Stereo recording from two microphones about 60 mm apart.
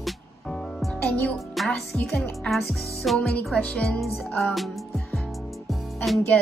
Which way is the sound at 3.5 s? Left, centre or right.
Centre.